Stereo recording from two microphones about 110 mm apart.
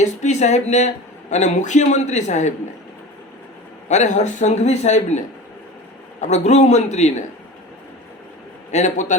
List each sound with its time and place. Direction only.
0.0 s speech: 90° left
3.8 s speech: 90° left
8.7 s speech: 90° left